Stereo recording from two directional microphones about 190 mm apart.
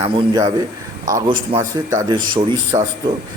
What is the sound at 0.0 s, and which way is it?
Speech, 30° right (ahead or behind).